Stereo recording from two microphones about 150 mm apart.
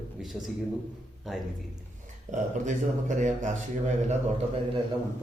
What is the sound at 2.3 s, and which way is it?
Speech, 55° right (ahead or behind).